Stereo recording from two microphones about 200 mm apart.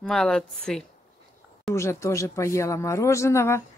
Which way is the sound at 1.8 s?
15° left (ahead or behind).